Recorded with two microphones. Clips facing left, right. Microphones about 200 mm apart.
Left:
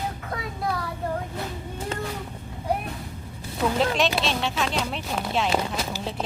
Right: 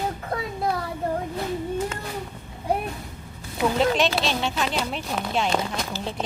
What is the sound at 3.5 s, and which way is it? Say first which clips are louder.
Speech: right 2 dB; centre (ahead or behind).